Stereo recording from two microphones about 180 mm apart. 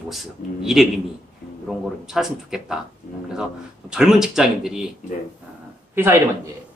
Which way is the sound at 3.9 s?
5° right (ahead or behind).